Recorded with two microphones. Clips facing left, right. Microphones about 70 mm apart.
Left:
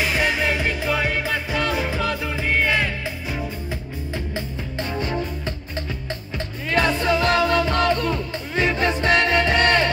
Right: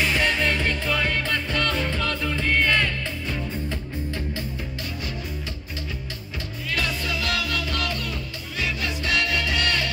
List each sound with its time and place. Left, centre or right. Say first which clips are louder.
0.0 s music: left 1 dB; centre
6.7 s music: left 9 dB; left